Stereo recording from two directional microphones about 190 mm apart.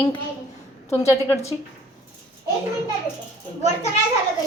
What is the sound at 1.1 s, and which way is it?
Speech, 15° left (ahead or behind).